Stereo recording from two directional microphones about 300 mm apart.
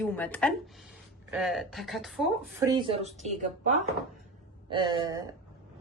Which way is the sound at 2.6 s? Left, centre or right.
Centre.